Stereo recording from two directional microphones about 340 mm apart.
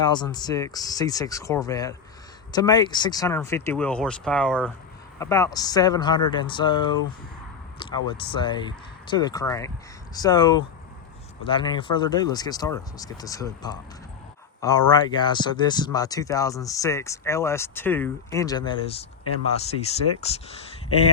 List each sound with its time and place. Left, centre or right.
0.0 s speech: centre
8.1 s speech: centre